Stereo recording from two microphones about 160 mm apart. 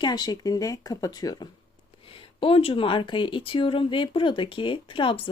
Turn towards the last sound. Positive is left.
turn(degrees=30)  # may be behind; listen again after turning